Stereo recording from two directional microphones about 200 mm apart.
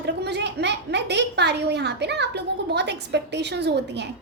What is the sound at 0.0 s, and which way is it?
A woman's voice, 60° right (ahead or behind).